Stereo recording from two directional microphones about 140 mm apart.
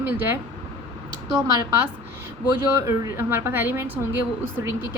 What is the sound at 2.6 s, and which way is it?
A woman's voice, 20° right (ahead or behind).